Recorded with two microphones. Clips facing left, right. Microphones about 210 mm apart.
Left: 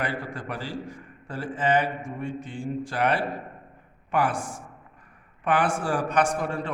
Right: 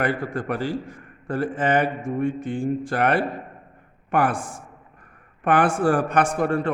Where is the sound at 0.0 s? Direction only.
50° right (ahead or behind).